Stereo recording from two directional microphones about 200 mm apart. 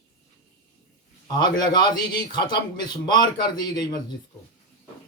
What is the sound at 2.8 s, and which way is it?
A man's voice, 20° left (ahead or behind).